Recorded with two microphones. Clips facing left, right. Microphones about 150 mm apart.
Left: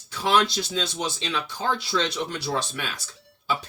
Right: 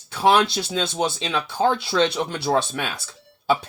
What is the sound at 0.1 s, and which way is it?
Speech, 60° right (ahead or behind).